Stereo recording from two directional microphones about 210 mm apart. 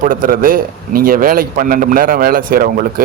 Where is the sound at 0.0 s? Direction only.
40° right (ahead or behind).